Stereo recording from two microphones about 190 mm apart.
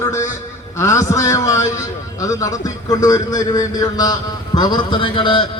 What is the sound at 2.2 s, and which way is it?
A man's voice, 20° left (ahead or behind).